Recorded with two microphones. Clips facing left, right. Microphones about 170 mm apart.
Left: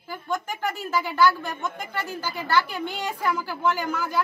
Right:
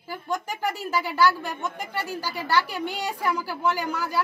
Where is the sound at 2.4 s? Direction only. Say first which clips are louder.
Left 1 dB; 35° right (ahead or behind).